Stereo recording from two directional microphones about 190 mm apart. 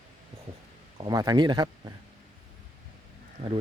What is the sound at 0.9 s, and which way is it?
Speech, 20° right (ahead or behind).